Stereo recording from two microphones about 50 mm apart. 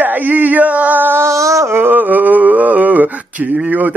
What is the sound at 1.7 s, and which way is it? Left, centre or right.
Speech, right.